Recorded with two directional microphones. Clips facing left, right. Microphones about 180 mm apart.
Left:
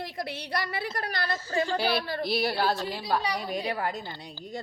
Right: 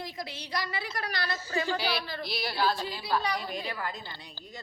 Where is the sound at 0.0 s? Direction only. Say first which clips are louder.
Left 4 dB; 60° left (ahead or behind).